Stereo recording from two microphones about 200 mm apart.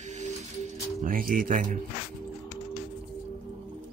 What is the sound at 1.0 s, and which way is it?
Speech, 45° right (ahead or behind).